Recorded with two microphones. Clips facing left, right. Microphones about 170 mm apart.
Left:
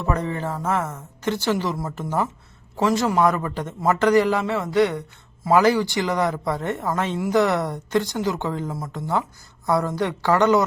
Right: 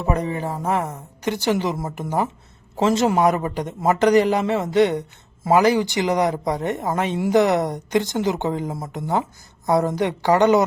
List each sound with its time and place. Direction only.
0.0 s a woman's voice: 15° right (ahead or behind)